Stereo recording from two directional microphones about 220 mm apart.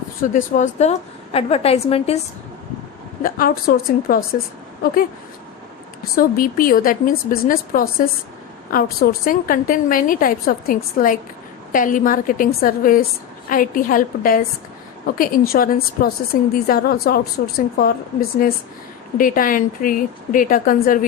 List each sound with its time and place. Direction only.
0.2 s a woman's voice: 35° left (ahead or behind)
3.2 s a woman's voice: 40° left (ahead or behind)
6.1 s a woman's voice: 40° left (ahead or behind)